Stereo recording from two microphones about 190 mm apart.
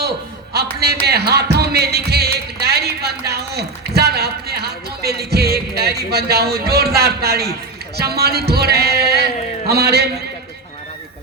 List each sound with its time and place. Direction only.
0.5 s music: 60° right (ahead or behind)
7.9 s speech: 55° right (ahead or behind)